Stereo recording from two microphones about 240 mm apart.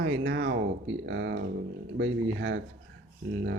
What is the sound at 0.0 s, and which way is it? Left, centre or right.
Speech, right.